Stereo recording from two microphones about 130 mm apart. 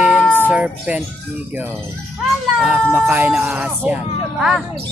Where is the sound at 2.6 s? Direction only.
Centre (ahead or behind).